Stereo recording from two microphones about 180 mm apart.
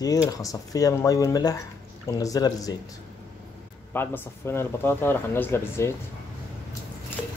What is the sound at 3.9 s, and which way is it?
Speech, 15° left (ahead or behind).